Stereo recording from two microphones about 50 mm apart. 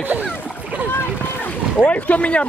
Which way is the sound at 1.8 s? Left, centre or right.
Left.